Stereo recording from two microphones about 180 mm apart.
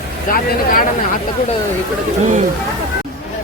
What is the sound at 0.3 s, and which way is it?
Speech, 50° left (ahead or behind).